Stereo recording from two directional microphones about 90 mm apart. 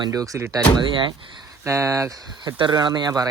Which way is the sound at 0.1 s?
40° right (ahead or behind).